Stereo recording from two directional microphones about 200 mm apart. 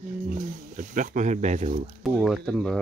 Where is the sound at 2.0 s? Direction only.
Centre (ahead or behind).